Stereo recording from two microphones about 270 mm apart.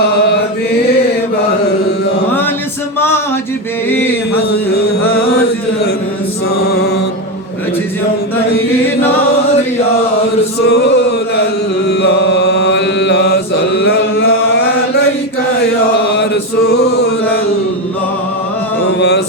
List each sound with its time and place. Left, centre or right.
6.6 s chant: left
10.6 s chant: left
16.0 s chant: left
18.9 s mantra: left